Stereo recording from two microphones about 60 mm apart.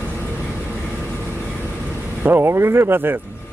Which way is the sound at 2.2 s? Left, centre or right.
Right.